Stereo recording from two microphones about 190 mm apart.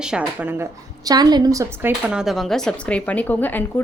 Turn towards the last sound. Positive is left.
turn(degrees=10)  # may be behind; listen again after turning